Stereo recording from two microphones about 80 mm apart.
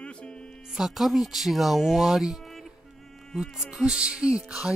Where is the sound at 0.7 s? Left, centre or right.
Centre.